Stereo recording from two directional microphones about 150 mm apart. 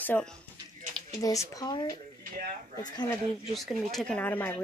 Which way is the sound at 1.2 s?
20° left (ahead or behind).